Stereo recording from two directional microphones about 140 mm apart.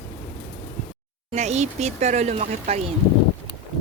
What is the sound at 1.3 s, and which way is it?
Speech, 55° right (ahead or behind).